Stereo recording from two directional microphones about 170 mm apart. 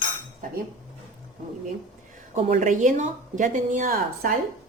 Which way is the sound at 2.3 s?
40° right (ahead or behind).